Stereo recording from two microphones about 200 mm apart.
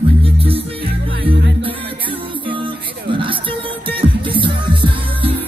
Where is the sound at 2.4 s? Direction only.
25° right (ahead or behind).